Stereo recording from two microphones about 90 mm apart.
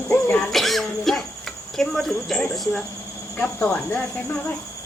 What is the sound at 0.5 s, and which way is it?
Cricket, centre (ahead or behind).